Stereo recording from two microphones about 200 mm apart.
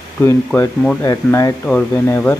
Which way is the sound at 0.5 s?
5° left (ahead or behind).